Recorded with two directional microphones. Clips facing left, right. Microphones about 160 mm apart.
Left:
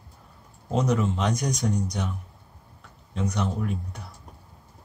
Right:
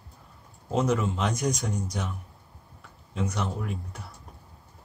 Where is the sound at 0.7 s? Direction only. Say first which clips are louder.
Left 1 dB; 5° right (ahead or behind).